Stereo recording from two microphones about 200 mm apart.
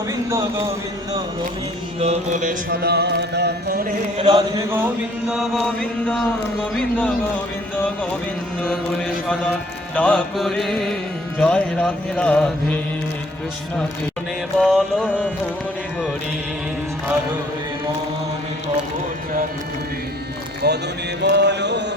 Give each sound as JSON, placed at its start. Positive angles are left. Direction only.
{"t": 0.1, "sound": "a sound", "side_deg": -15}
{"t": 2.0, "sound": "music", "side_deg": -35}
{"t": 4.2, "sound": "chant", "side_deg": -25}
{"t": 5.3, "sound": "speech", "side_deg": 0}
{"t": 9.2, "sound": "speech", "side_deg": 5}
{"t": 14.6, "sound": "speech", "side_deg": 5}
{"t": 20.6, "sound": "speech", "side_deg": -55}
{"t": 21.2, "sound": "mantra", "side_deg": -60}